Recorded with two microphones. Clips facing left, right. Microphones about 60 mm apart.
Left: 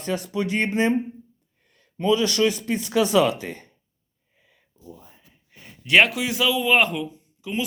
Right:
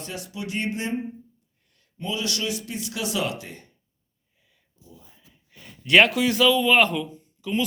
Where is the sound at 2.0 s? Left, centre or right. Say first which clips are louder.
Left 9 dB; left.